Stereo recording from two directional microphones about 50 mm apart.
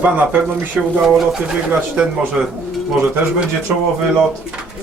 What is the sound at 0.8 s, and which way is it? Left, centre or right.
Speech, centre.